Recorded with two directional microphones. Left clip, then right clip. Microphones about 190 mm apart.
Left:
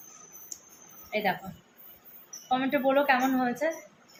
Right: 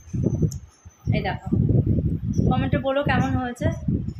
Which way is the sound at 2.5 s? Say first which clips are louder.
Even; 10° right (ahead or behind).